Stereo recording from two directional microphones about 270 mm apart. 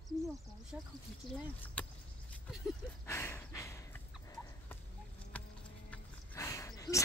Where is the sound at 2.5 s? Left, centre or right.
Centre.